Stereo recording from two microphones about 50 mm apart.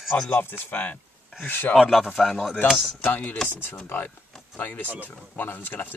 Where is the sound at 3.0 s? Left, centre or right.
Left.